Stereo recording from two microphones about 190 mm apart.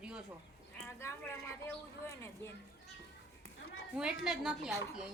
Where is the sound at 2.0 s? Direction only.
15° left (ahead or behind).